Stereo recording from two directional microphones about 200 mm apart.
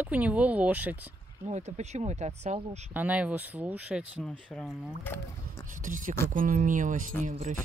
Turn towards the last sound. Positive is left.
turn(degrees=-35)  # may be behind; listen again after turning